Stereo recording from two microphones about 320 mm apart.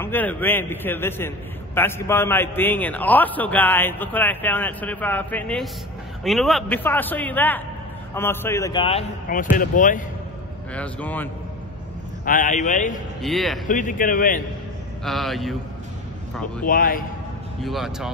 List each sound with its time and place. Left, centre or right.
0.0 s a man's voice: centre; by 10.0 s left
10.7 s a man's voice: centre
12.3 s a man's voice: left
13.2 s a man's voice: centre
13.7 s a man's voice: left
15.0 s a man's voice: centre
16.6 s a man's voice: left
17.6 s a man's voice: centre